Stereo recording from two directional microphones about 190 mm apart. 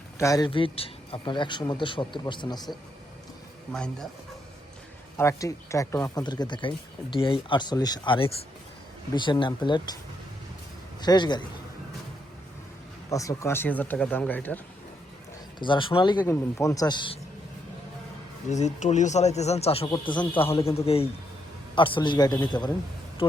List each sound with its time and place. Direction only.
0.2 s speech: 20° left (ahead or behind)
5.1 s speech: 15° left (ahead or behind)
11.0 s speech: 20° left (ahead or behind)
13.1 s speech: 15° left (ahead or behind)
15.5 s speech: 25° left (ahead or behind)
18.4 s speech: 40° left (ahead or behind); by 22.7 s 20° left (ahead or behind)